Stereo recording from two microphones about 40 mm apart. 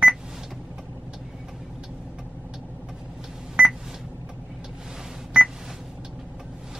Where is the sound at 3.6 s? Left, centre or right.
Right.